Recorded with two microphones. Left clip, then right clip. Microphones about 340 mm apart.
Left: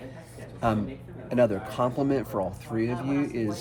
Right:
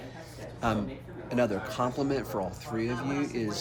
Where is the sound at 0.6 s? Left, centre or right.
Left.